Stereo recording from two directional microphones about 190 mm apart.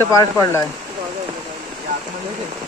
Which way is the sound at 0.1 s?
15° left (ahead or behind).